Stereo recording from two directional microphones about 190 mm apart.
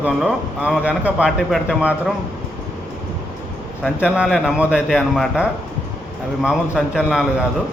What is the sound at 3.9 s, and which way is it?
A man's voice, 5° right (ahead or behind).